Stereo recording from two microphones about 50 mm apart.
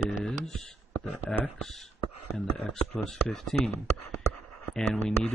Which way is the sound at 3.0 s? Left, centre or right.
Centre.